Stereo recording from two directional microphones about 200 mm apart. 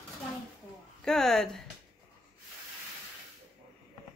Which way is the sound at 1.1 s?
Centre (ahead or behind).